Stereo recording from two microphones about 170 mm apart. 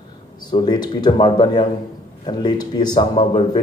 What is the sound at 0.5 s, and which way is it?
Speech, 25° left (ahead or behind).